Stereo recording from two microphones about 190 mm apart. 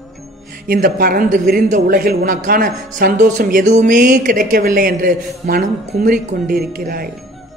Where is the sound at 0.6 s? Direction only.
50° right (ahead or behind).